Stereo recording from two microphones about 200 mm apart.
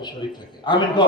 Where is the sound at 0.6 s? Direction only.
20° left (ahead or behind).